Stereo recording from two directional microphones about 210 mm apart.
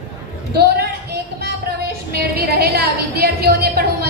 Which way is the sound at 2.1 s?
50° right (ahead or behind).